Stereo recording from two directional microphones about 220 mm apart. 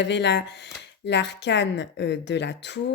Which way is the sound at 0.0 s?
50° left (ahead or behind).